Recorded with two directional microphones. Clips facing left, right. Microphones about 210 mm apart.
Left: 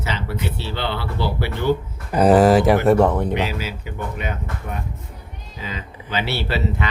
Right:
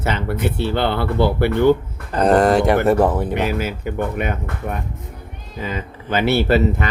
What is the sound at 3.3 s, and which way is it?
Speech, 50° right (ahead or behind).